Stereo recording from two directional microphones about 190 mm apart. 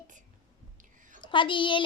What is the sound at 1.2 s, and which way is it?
Speech, 25° left (ahead or behind).